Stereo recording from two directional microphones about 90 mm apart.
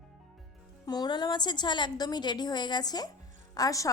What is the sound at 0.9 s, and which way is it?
A woman's voice, 50° left (ahead or behind).